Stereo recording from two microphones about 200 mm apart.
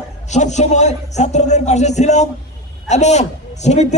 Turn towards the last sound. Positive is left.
turn(degrees=35)  # may be behind; listen again after turning